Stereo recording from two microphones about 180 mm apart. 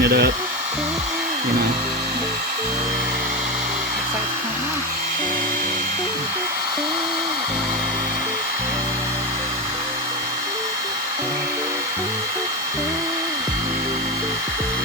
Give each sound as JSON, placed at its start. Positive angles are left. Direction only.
{"t": 0.0, "sound": "speech", "side_deg": -65}